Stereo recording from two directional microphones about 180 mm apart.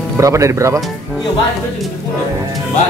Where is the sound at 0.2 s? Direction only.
15° right (ahead or behind).